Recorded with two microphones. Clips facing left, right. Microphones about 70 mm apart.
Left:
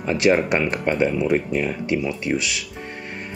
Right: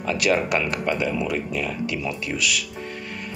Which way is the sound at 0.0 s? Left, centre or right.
Left.